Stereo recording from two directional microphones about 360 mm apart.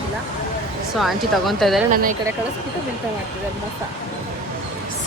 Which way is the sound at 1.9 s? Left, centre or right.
Right.